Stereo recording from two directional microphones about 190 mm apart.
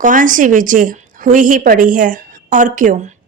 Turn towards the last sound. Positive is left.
turn(degrees=-40)  # may be behind; listen again after turning